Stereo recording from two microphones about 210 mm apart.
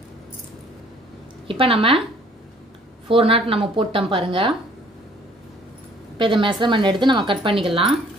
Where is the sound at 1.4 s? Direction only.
25° right (ahead or behind).